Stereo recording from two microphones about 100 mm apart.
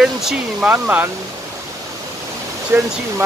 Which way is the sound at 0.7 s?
20° right (ahead or behind).